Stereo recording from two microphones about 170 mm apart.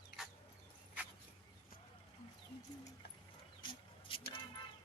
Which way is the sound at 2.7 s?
25° left (ahead or behind).